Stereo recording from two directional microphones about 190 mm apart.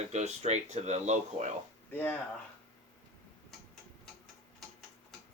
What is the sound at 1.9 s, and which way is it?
Speech, 10° left (ahead or behind).